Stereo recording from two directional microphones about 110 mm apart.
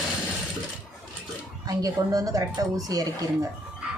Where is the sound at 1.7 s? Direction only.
35° right (ahead or behind).